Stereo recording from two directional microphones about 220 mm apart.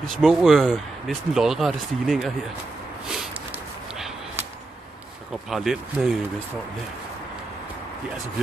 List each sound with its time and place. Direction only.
0.0 s speech: centre (ahead or behind)
3.1 s a sound: 5° right (ahead or behind)
5.5 s speech: centre (ahead or behind)